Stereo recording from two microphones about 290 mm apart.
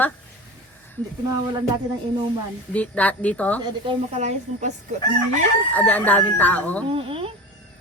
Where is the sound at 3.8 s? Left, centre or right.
Right.